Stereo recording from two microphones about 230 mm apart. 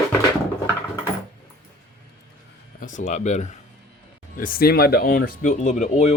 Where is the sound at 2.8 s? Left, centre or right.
Left.